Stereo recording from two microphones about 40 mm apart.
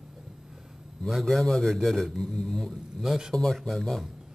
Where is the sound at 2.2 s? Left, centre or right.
Centre.